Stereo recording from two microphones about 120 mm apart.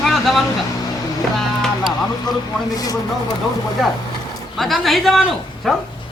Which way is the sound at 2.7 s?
30° left (ahead or behind).